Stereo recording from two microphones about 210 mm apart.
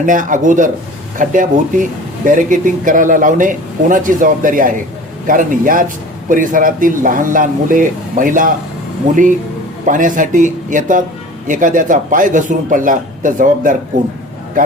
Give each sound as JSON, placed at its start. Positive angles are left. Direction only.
{"t": 0.0, "sound": "speech", "side_deg": -40}
{"t": 9.8, "sound": "speech", "side_deg": -40}